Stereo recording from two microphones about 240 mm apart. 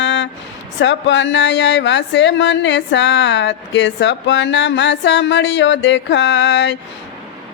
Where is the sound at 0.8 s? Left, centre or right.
Left.